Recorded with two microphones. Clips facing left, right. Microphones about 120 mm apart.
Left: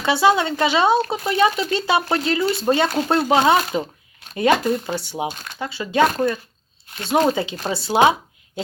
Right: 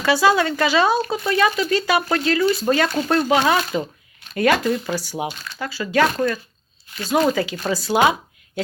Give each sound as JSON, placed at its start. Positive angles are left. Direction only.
{"t": 0.0, "sound": "speech", "side_deg": 25}